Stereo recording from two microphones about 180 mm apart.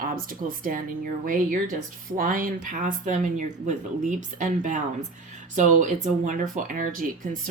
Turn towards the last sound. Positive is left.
turn(degrees=-50)  # may be behind; listen again after turning